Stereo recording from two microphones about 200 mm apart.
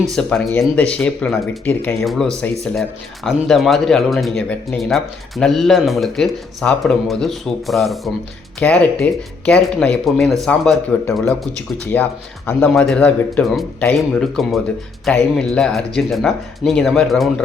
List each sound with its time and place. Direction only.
0.1 s speech: centre (ahead or behind)
11.9 s speech: 10° left (ahead or behind)